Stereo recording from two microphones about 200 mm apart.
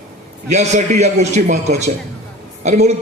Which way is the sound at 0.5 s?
35° right (ahead or behind).